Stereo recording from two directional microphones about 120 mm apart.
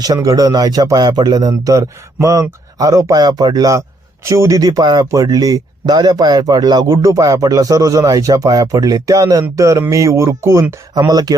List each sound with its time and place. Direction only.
0.0 s speech: 30° right (ahead or behind)
10.9 s speech: 35° right (ahead or behind)